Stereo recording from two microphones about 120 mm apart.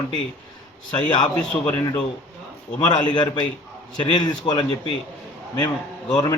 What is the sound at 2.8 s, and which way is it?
A man's voice, 35° left (ahead or behind).